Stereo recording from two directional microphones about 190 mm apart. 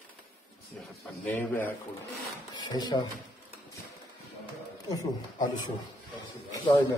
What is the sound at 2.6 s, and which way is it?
Speech, 20° left (ahead or behind).